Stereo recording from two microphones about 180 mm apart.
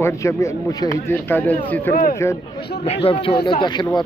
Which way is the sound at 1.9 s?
50° left (ahead or behind).